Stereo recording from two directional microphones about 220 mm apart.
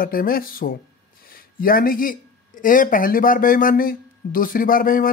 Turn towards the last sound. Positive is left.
turn(degrees=40)  # may be behind; listen again after turning